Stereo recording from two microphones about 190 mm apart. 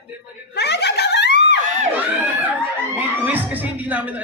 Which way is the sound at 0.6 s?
60° left (ahead or behind).